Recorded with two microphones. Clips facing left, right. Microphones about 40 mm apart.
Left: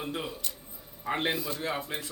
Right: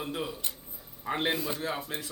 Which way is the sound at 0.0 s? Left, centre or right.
Centre.